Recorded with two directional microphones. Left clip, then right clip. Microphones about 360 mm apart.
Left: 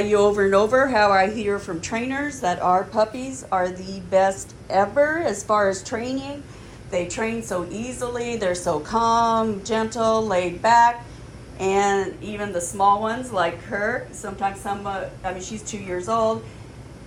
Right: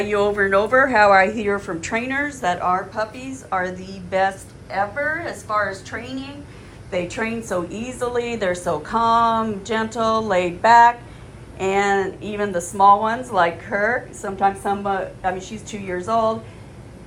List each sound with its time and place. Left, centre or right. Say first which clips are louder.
0.0 s a woman's voice: left 1 dB; centre